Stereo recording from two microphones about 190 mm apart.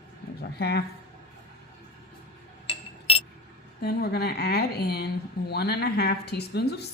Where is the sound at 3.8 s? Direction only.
60° left (ahead or behind).